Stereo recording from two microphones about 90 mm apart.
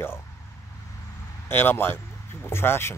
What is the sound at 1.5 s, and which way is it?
Speech, 25° left (ahead or behind).